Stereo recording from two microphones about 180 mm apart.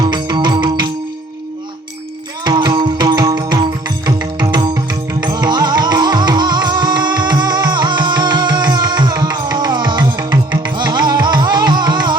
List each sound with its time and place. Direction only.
0.0 s music: 25° right (ahead or behind)
2.4 s music: 25° right (ahead or behind)